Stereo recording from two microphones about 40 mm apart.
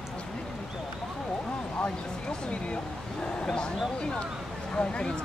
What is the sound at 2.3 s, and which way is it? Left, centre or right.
Speech, left.